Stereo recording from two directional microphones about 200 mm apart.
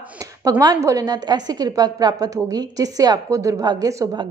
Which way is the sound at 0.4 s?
20° right (ahead or behind).